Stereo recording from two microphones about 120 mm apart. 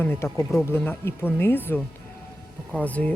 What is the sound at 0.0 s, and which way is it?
Speech, 15° left (ahead or behind).